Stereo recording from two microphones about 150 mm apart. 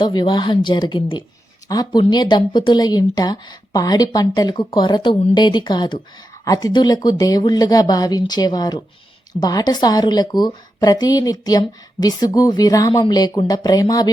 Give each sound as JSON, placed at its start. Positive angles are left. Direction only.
{"t": 0.0, "sound": "a woman's voice", "side_deg": 30}